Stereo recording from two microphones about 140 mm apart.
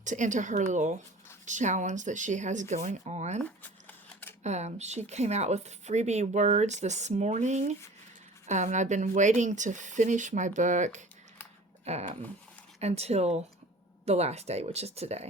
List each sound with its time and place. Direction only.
0.0 s speech: 60° right (ahead or behind)
3.6 s a sound: 15° left (ahead or behind)
4.4 s speech: 55° right (ahead or behind)